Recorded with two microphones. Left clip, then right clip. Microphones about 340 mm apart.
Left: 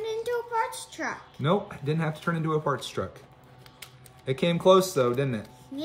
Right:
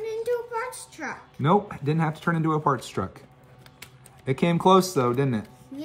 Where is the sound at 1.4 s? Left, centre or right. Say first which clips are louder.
Right 5 dB; centre.